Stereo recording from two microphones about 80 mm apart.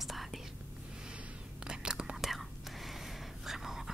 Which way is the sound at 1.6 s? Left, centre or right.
Centre.